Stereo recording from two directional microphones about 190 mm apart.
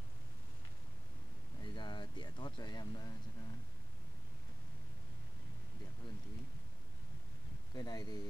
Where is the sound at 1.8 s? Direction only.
25° left (ahead or behind).